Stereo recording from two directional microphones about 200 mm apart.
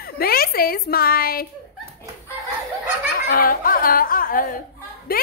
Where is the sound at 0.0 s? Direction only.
50° left (ahead or behind).